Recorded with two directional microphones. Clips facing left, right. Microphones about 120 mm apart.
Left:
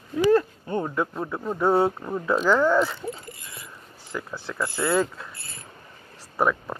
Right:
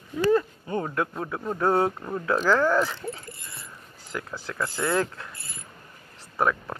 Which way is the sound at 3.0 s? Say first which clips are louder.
Left 1 dB; 20° left (ahead or behind).